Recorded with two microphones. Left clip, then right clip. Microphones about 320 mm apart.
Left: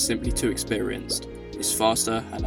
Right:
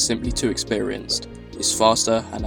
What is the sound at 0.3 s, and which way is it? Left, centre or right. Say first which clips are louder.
Speech: right 5 dB; left.